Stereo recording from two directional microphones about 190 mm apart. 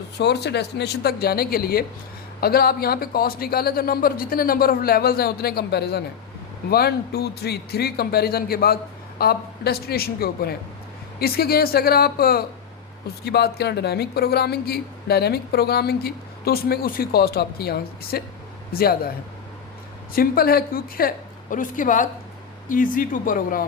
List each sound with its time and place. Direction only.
0.2 s a woman's voice: 60° left (ahead or behind)
20.1 s speech: 50° left (ahead or behind)